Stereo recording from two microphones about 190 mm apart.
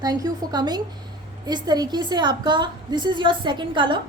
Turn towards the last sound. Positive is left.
turn(degrees=-25)  # may be behind; listen again after turning